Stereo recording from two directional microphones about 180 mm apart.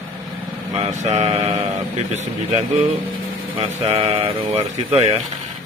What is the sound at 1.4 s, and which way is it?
Speech, 20° right (ahead or behind).